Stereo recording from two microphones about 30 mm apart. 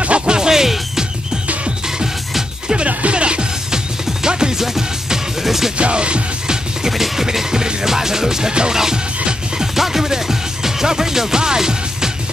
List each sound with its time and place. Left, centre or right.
0.3 s music: right
3.1 s music: right
4.6 s music: centre
5.8 s music: right
6.4 s music: right
6.9 s music: centre